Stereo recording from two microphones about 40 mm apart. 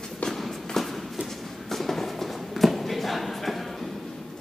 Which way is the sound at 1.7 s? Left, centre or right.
Centre.